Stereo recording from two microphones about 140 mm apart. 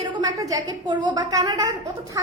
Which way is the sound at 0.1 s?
25° right (ahead or behind).